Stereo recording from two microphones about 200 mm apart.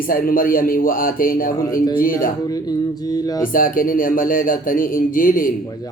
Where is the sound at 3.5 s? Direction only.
45° left (ahead or behind).